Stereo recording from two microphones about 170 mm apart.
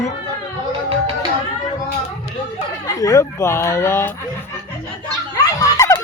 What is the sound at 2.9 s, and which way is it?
A man's voice, 20° left (ahead or behind).